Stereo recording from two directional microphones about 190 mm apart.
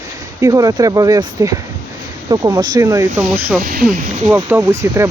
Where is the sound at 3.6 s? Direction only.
50° right (ahead or behind).